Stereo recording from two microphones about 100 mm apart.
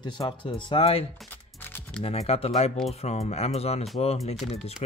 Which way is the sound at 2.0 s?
90° left.